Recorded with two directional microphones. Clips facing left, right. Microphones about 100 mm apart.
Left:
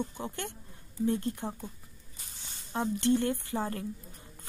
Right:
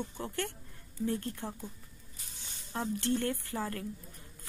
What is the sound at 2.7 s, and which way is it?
Speech, 20° left (ahead or behind).